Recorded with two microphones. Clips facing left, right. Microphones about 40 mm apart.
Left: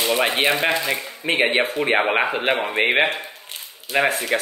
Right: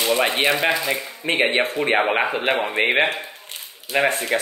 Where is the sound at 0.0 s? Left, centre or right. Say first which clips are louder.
Even; centre.